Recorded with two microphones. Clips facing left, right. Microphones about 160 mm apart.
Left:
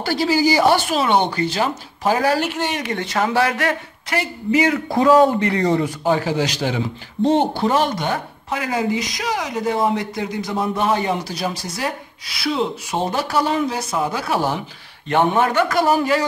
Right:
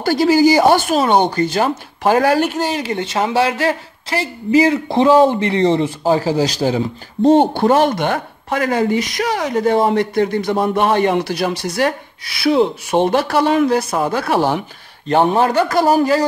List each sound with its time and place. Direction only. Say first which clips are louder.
0.0 s speech: right 6 dB; 45° right (ahead or behind)
7.2 s speech: right 6 dB; 55° right (ahead or behind)
15.0 s speech: right 3 dB; 35° right (ahead or behind)